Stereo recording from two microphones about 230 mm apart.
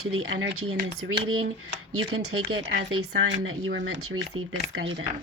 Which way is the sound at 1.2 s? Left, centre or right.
Right.